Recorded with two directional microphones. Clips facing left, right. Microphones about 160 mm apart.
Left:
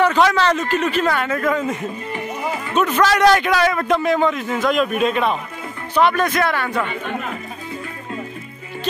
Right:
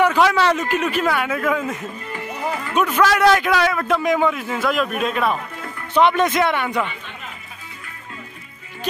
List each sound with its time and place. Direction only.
0.0 s a man's voice: 10° right (ahead or behind)
2.1 s music: 20° left (ahead or behind)
3.0 s a man's voice: 5° right (ahead or behind)
5.9 s speech: 20° right (ahead or behind)
6.9 s speech: 55° left (ahead or behind)